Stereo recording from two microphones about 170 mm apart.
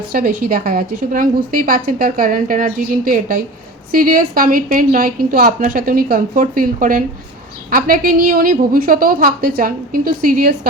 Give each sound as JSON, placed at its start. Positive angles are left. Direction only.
{"t": 0.1, "sound": "a woman's voice", "side_deg": -55}